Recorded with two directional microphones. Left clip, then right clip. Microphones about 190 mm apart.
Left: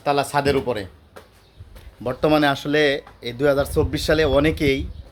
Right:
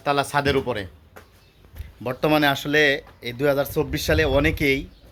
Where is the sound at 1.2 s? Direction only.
50° left (ahead or behind).